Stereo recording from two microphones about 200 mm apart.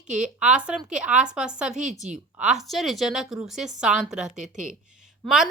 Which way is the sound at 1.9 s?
40° right (ahead or behind).